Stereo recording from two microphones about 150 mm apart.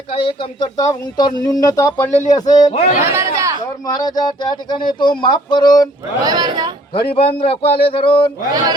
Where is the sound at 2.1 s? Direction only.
50° left (ahead or behind).